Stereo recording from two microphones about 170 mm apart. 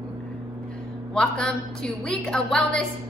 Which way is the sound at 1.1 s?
5° left (ahead or behind).